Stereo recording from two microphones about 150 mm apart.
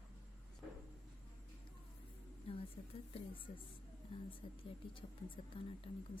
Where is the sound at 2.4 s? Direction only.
40° left (ahead or behind).